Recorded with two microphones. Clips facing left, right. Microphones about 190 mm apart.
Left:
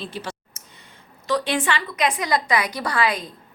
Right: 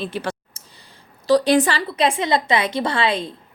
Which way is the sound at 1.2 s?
35° right (ahead or behind).